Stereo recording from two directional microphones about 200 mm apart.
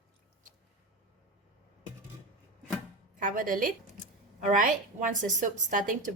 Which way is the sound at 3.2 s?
45° right (ahead or behind).